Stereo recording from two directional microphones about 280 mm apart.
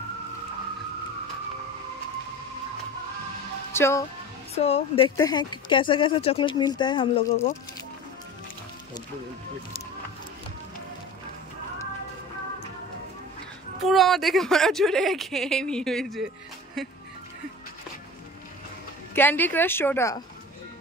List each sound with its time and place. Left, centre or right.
3.7 s speech: centre
4.6 s speech: left
13.8 s speech: centre
19.1 s speech: centre